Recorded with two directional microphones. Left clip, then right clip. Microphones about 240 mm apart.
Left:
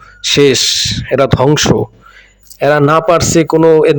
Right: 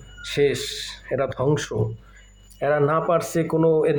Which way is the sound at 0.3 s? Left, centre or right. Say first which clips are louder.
Left 13 dB; left.